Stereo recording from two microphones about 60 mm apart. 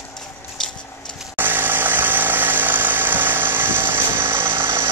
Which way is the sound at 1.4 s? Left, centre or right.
Right.